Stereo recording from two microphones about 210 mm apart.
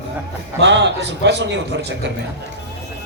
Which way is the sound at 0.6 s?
55° right (ahead or behind).